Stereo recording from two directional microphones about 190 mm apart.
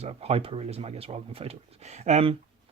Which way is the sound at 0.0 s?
35° right (ahead or behind).